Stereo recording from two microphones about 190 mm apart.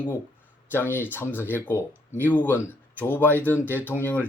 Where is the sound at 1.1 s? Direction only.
10° left (ahead or behind).